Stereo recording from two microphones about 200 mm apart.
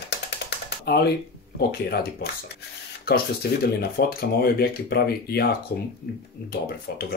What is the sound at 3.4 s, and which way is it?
Speech, 55° left (ahead or behind).